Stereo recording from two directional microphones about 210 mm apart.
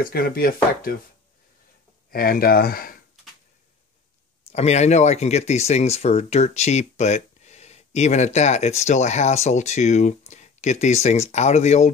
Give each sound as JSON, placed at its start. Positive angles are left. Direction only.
{"t": 0.0, "sound": "speech", "side_deg": 45}
{"t": 2.0, "sound": "speech", "side_deg": 45}
{"t": 4.5, "sound": "speech", "side_deg": 30}